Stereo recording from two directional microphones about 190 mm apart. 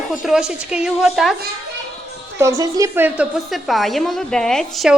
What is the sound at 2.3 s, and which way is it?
A woman's voice, 15° right (ahead or behind).